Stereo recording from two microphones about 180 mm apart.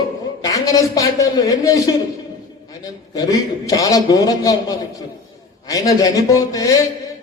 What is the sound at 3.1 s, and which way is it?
Speech, 20° left (ahead or behind).